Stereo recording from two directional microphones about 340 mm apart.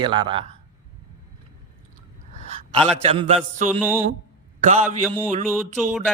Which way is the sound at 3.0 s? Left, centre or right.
Centre.